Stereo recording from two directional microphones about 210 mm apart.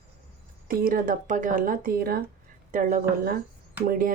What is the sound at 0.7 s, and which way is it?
Speech, 45° right (ahead or behind).